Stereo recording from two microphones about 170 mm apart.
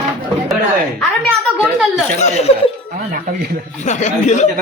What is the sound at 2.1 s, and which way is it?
Speech, 40° left (ahead or behind).